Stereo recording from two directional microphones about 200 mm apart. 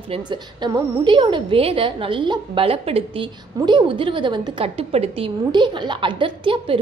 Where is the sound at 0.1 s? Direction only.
20° right (ahead or behind).